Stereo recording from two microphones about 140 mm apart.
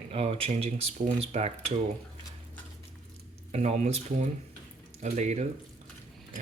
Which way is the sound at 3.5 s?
50° right (ahead or behind).